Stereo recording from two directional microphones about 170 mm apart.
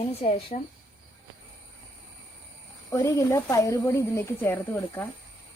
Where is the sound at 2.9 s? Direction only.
20° left (ahead or behind).